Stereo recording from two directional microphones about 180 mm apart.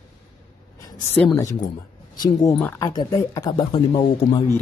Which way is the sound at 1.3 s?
20° left (ahead or behind).